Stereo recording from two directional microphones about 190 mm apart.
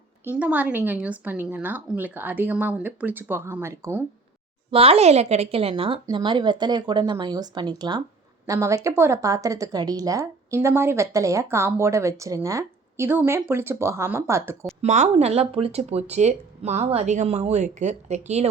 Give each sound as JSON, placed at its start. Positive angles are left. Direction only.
{"t": 0.3, "sound": "a woman's voice", "side_deg": -5}
{"t": 4.7, "sound": "a woman's voice", "side_deg": -30}
{"t": 14.8, "sound": "speech", "side_deg": -40}